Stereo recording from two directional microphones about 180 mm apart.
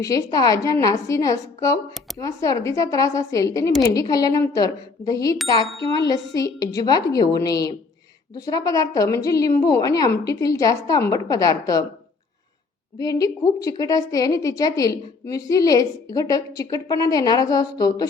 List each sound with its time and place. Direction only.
0.0 s a woman's voice: 20° left (ahead or behind)
13.0 s a woman's voice: 20° left (ahead or behind)